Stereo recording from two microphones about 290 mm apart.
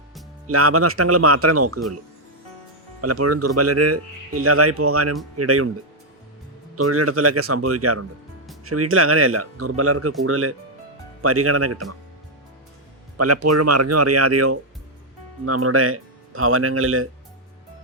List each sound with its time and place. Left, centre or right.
0.4 s speech: right
3.0 s speech: right
6.7 s speech: right
13.1 s speech: right